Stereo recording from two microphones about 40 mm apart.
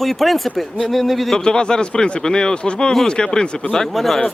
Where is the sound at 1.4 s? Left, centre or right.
Left.